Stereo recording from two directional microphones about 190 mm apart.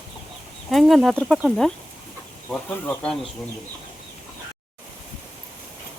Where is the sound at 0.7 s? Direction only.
Centre (ahead or behind).